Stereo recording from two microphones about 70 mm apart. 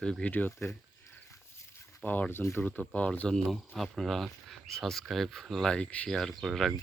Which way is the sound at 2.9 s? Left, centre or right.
Centre.